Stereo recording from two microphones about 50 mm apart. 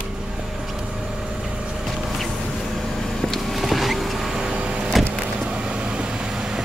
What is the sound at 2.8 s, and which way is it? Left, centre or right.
Vehicle, centre.